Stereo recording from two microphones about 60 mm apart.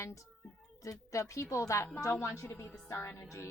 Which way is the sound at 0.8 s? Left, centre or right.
Left.